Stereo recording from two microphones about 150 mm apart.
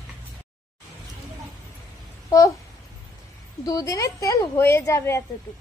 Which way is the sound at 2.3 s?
25° left (ahead or behind).